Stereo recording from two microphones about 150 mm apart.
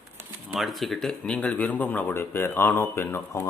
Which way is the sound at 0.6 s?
Centre (ahead or behind).